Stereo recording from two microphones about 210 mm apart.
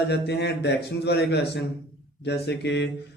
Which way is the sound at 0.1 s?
50° left (ahead or behind).